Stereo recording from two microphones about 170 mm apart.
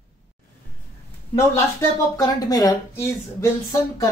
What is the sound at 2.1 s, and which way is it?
Speech, 20° left (ahead or behind).